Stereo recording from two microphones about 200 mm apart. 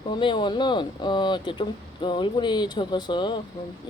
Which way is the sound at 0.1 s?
25° left (ahead or behind).